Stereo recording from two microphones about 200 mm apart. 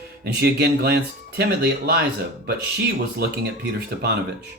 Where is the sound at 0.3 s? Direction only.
55° right (ahead or behind).